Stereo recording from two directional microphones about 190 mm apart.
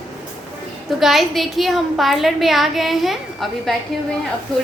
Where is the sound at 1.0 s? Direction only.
Centre (ahead or behind).